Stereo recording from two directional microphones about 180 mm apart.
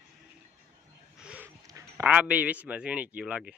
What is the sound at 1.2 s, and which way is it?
Dog, 5° right (ahead or behind).